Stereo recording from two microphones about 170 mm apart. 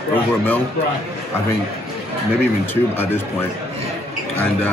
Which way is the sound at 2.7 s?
10° left (ahead or behind).